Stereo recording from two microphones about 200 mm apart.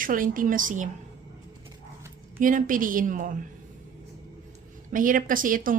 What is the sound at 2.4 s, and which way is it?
Speech, 40° right (ahead or behind).